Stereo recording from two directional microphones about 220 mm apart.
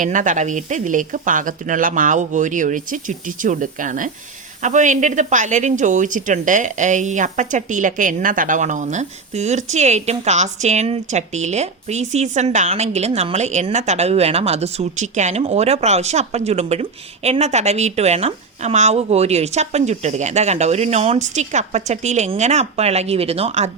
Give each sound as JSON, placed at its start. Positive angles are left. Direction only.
{"t": 0.0, "sound": "a woman's voice", "side_deg": -35}